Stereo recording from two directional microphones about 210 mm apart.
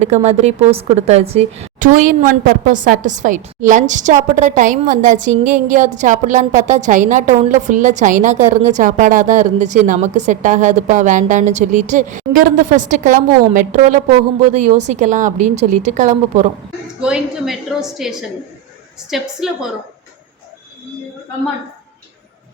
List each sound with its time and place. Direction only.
0.0 s a woman's voice: 30° right (ahead or behind)
17.0 s a woman's voice: 5° right (ahead or behind)